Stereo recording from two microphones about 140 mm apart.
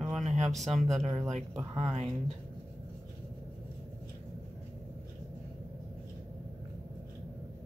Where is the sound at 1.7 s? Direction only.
45° right (ahead or behind).